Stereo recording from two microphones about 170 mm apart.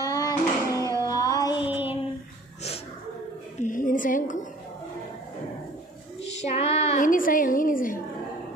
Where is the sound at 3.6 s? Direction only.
50° left (ahead or behind).